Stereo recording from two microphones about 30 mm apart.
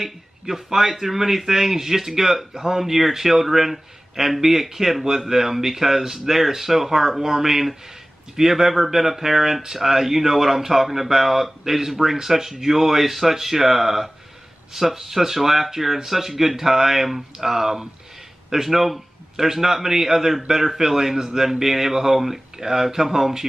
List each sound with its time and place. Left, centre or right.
0.0 s speech: centre
2.5 s speech: right
2.8 s speech: centre